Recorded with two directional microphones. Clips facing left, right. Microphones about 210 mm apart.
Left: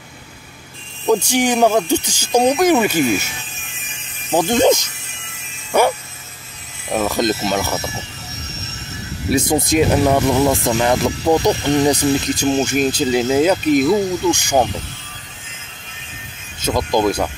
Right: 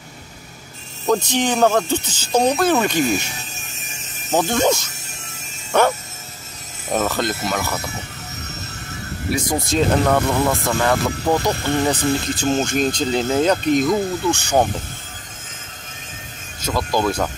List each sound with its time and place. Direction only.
1.0 s speech: 10° left (ahead or behind)
3.3 s a sound: 40° right (ahead or behind)
4.3 s speech: 15° left (ahead or behind)
5.7 s music: 10° left (ahead or behind)
6.9 s speech: 10° left (ahead or behind)
9.5 s speech: 15° left (ahead or behind)
16.6 s speech: 20° left (ahead or behind)